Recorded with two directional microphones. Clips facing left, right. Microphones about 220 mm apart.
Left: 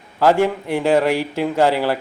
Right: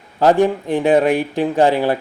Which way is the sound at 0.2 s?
15° right (ahead or behind).